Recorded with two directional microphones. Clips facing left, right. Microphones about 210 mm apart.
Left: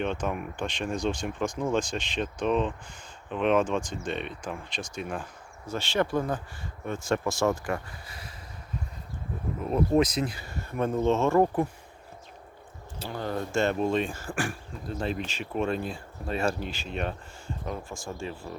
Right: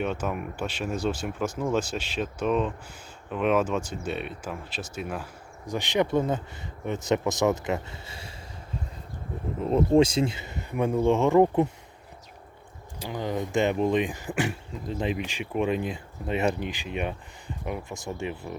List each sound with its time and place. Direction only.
0.0 s speech: 5° right (ahead or behind); by 8.3 s 25° right (ahead or behind)
9.6 s speech: 25° right (ahead or behind)
13.0 s speech: 15° right (ahead or behind)